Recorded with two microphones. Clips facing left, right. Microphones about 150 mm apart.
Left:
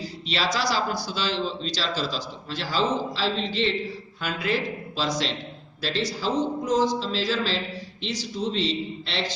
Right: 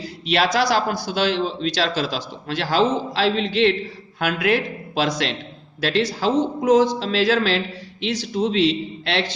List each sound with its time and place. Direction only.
0.0 s a man's voice: 55° right (ahead or behind)